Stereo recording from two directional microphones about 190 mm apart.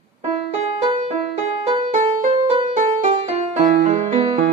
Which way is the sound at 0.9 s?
35° right (ahead or behind).